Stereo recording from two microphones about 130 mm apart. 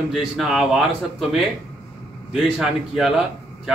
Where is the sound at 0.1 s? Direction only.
5° right (ahead or behind).